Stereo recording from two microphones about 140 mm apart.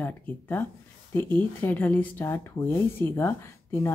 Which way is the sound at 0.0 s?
15° left (ahead or behind).